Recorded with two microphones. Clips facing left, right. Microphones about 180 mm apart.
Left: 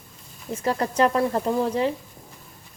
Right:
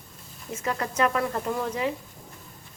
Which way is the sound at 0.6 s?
30° left (ahead or behind).